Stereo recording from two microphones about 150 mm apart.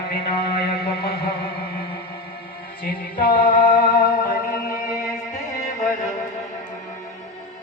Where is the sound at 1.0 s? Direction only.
90° left.